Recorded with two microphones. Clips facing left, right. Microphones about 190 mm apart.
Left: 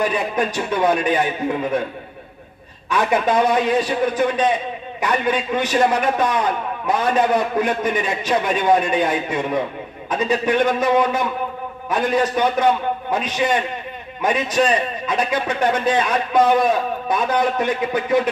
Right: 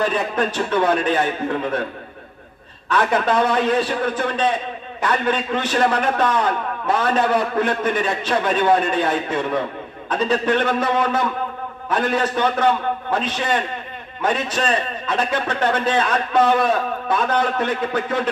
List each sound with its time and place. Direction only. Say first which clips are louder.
0.0 s a man's voice: even; 10° left (ahead or behind)
2.9 s a man's voice: even; 10° left (ahead or behind)